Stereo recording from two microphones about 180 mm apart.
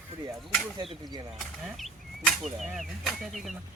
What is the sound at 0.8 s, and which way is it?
Speech, 25° right (ahead or behind).